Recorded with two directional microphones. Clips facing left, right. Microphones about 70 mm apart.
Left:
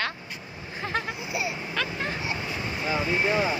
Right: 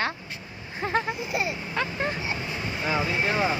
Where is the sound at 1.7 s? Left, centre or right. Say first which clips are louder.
Right 3 dB; right.